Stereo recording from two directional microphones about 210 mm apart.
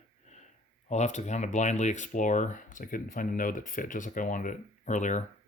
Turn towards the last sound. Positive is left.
turn(degrees=35)  # may be behind; listen again after turning